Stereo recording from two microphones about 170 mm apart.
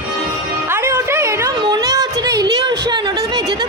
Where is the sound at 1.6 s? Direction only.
25° right (ahead or behind).